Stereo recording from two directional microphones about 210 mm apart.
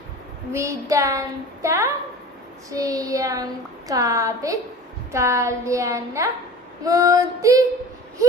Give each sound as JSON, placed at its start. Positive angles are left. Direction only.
{"t": 0.5, "sound": "a woman's voice", "side_deg": -15}